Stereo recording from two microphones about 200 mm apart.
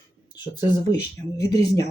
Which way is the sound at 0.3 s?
20° left (ahead or behind).